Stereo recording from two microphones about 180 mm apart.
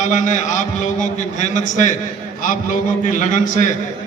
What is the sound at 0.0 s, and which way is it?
A man's voice, 45° left (ahead or behind).